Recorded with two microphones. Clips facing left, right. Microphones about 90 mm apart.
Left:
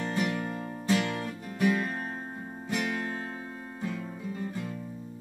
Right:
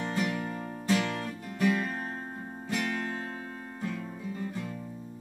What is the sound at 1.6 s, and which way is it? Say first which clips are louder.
Music: left 1 dB; 15° left (ahead or behind).